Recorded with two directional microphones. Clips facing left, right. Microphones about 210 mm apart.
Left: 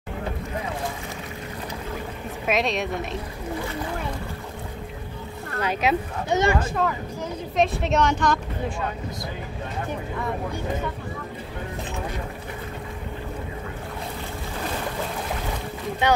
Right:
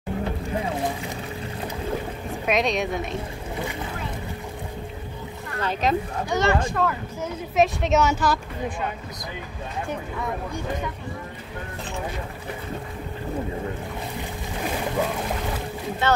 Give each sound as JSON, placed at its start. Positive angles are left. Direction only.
{"t": 2.4, "sound": "speech", "side_deg": 0}
{"t": 5.6, "sound": "speech", "side_deg": 10}
{"t": 6.6, "sound": "speech", "side_deg": 0}
{"t": 16.0, "sound": "speech", "side_deg": 15}